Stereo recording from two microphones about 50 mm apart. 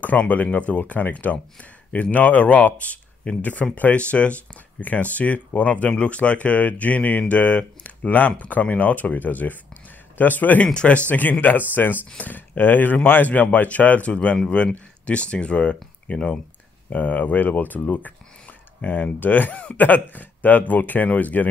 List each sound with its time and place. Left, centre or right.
0.0 s speech: left
10.6 s speech: left